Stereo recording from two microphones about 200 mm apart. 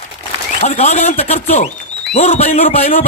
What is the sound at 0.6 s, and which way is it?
A man's voice, 35° left (ahead or behind).